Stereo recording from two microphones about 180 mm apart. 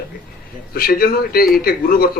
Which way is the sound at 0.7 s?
55° left (ahead or behind).